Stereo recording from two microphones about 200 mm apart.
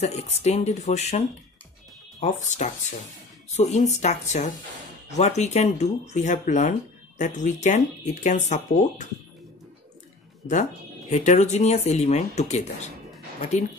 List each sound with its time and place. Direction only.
0.0 s speech: 35° left (ahead or behind)
10.4 s speech: 35° left (ahead or behind)